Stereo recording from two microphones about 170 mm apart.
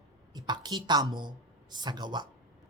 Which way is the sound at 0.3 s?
25° right (ahead or behind).